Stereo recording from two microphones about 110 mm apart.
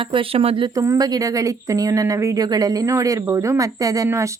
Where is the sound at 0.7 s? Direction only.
30° right (ahead or behind).